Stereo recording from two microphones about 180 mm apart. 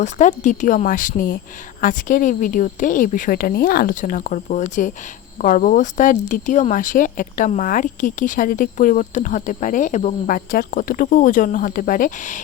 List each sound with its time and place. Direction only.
0.0 s speech: 40° left (ahead or behind)